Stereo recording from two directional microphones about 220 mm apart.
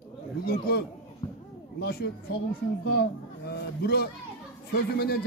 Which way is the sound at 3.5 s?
45° left (ahead or behind).